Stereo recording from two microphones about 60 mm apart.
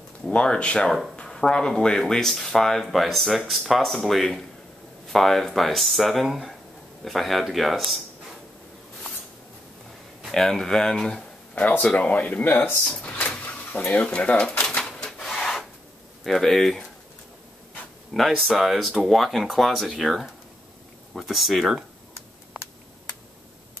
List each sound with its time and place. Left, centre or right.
0.2 s speech: centre
10.2 s speech: centre
11.8 s speech: left
14.8 s a sound: centre
15.2 s rub: centre
16.3 s speech: centre
18.1 s speech: centre